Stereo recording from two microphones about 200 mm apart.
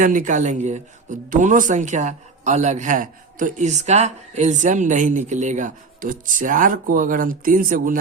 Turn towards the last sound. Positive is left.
turn(degrees=-45)  # may be behind; listen again after turning